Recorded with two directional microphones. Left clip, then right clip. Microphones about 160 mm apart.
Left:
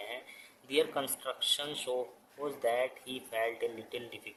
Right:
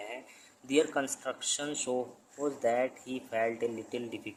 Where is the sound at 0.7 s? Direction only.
40° right (ahead or behind).